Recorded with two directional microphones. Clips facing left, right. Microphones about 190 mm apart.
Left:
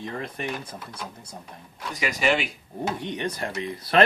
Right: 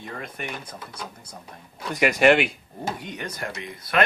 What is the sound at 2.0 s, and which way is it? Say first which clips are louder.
Speech: right 7 dB; 60° right (ahead or behind).